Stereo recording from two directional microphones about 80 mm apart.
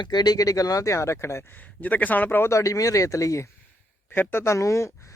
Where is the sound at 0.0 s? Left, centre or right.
Left.